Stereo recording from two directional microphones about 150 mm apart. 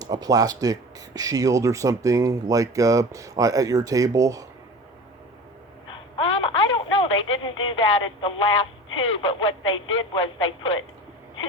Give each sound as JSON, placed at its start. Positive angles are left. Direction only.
{"t": 0.0, "sound": "speech", "side_deg": -25}
{"t": 6.1, "sound": "telephone", "side_deg": 40}